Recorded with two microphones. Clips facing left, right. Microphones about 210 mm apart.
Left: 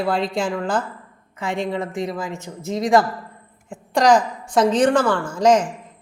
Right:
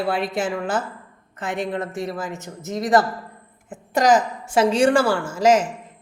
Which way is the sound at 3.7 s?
5° right (ahead or behind).